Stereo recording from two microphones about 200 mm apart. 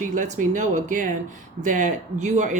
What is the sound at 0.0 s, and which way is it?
Speech, 40° right (ahead or behind).